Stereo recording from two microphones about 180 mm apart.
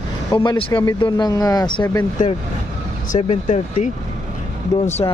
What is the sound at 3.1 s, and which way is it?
Speech, 40° left (ahead or behind).